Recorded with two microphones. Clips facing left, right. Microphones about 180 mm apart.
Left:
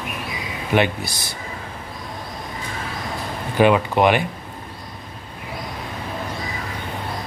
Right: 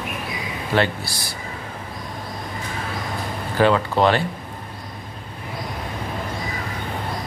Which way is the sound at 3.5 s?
15° left (ahead or behind).